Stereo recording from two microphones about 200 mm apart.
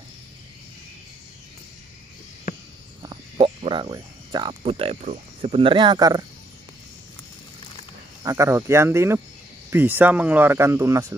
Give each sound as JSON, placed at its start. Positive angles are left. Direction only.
{"t": 3.0, "sound": "speech", "side_deg": -25}
{"t": 8.2, "sound": "speech", "side_deg": -15}